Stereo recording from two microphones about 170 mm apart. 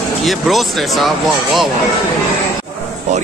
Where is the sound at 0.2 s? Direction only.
Centre (ahead or behind).